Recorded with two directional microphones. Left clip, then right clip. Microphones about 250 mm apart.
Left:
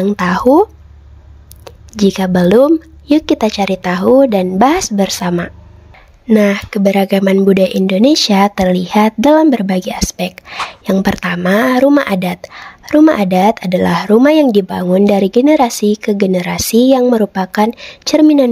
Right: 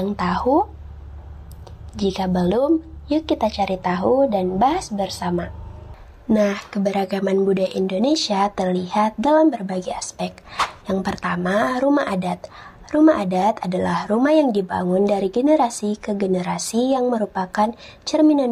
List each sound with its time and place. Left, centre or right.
0.2 s a woman's voice: left
1.6 s a woman's voice: left